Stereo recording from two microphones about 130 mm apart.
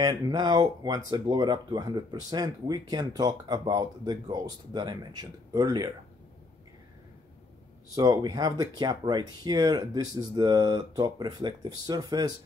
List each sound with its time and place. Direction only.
0.0 s speech: 30° right (ahead or behind)
7.9 s speech: 30° right (ahead or behind)